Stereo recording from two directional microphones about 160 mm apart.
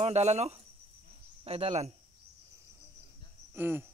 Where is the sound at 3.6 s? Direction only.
15° right (ahead or behind).